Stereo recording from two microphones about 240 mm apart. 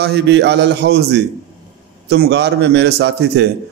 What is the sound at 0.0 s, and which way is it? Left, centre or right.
A man's voice, right.